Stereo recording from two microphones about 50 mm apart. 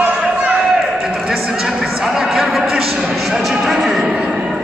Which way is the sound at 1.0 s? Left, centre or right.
Centre.